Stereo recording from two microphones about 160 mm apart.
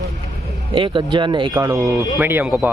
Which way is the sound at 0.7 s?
30° right (ahead or behind).